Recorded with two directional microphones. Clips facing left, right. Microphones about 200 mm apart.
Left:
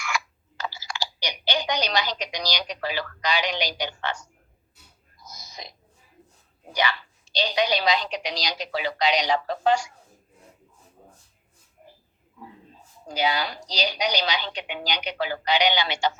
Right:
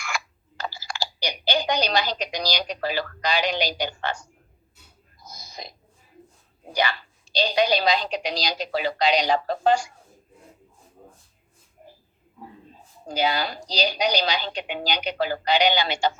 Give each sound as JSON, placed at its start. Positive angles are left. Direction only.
{"t": 0.0, "sound": "speech", "side_deg": -35}
{"t": 5.2, "sound": "a sound", "side_deg": -55}
{"t": 6.8, "sound": "a woman's voice", "side_deg": -35}
{"t": 13.1, "sound": "a woman's voice", "side_deg": -40}